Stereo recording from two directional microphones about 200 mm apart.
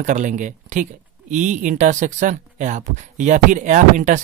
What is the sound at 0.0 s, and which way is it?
Speech, 40° right (ahead or behind).